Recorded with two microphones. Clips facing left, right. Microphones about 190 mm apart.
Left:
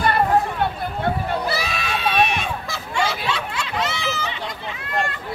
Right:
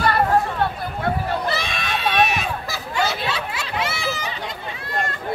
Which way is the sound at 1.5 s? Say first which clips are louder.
Even; 5° left (ahead or behind).